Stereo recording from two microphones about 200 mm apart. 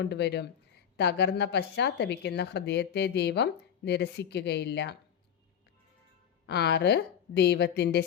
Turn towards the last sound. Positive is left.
turn(degrees=55)  # may be behind; listen again after turning